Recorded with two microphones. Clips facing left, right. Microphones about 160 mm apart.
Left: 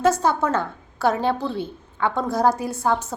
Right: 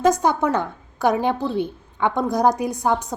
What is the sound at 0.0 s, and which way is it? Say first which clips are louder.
A woman's voice: right 1 dB; 15° right (ahead or behind).